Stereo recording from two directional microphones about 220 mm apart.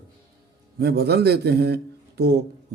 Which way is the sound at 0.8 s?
45° right (ahead or behind).